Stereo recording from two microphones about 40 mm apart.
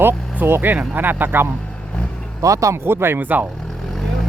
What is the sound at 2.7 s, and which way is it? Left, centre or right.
Speech, right.